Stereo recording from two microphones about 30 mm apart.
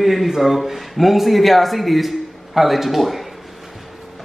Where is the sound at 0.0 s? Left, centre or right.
Centre.